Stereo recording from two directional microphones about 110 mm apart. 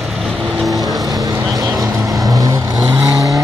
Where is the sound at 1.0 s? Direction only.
35° right (ahead or behind).